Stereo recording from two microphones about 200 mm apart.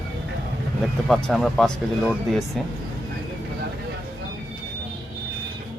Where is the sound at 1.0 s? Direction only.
Centre (ahead or behind).